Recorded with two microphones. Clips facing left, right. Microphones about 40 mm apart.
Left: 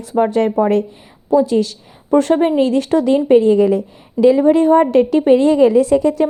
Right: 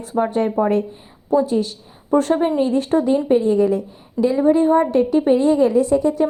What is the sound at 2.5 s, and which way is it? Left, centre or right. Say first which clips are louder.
Speech: left 3 dB; left.